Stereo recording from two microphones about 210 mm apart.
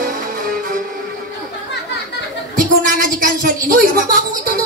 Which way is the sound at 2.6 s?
40° right (ahead or behind).